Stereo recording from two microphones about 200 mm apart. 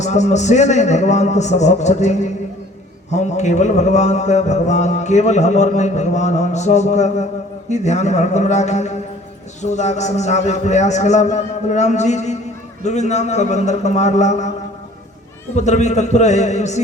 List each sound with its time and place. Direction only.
0.0 s mantra: 35° left (ahead or behind)
15.5 s mantra: 35° left (ahead or behind)